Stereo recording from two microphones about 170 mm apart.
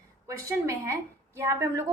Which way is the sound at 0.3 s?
15° right (ahead or behind).